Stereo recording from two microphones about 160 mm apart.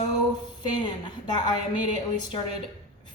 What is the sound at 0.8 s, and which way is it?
Speech, 30° left (ahead or behind).